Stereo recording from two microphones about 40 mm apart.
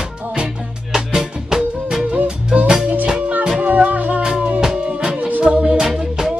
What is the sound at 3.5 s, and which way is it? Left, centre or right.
Music, right.